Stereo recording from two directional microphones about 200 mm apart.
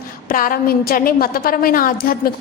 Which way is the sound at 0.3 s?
45° left (ahead or behind).